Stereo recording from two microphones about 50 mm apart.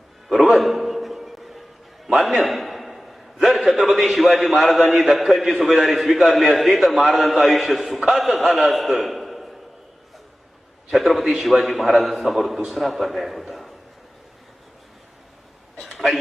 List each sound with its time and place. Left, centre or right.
0.3 s music: centre
2.1 s a sound: centre
3.9 s a man's voice: centre
10.9 s a man's voice: centre